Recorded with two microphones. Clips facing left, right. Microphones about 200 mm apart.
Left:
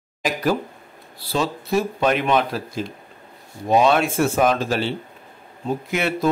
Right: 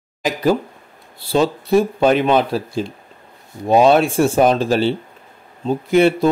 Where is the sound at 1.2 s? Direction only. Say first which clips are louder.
Right 7 dB; 30° right (ahead or behind).